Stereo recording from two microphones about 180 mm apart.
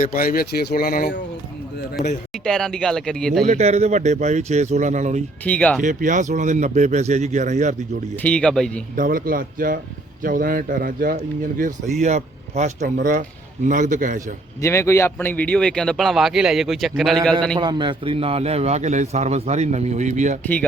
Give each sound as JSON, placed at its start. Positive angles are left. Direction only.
{"t": 0.0, "sound": "speech", "side_deg": 50}
{"t": 2.3, "sound": "speech", "side_deg": 5}
{"t": 3.4, "sound": "a man's voice", "side_deg": -40}
{"t": 5.4, "sound": "speech", "side_deg": 10}
{"t": 5.8, "sound": "speech", "side_deg": -45}
{"t": 8.1, "sound": "speech", "side_deg": 5}
{"t": 9.0, "sound": "speech", "side_deg": -50}
{"t": 12.0, "sound": "a man's voice", "side_deg": -40}
{"t": 14.6, "sound": "speech", "side_deg": 15}
{"t": 17.6, "sound": "a man's voice", "side_deg": -25}